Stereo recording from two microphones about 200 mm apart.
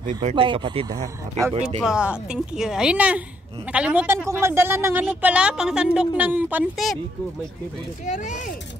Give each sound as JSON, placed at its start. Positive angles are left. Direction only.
{"t": 0.0, "sound": "speech", "side_deg": -35}
{"t": 1.8, "sound": "a woman's voice", "side_deg": -5}
{"t": 8.0, "sound": "speech", "side_deg": 35}